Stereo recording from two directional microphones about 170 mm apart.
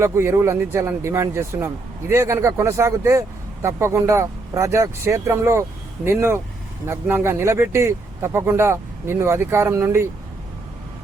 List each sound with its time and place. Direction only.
0.0 s speech: 15° right (ahead or behind)